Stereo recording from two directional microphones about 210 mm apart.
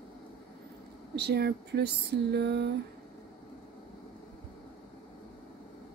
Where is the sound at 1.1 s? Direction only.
50° right (ahead or behind).